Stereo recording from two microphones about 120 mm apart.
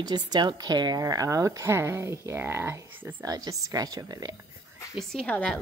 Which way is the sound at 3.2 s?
30° right (ahead or behind).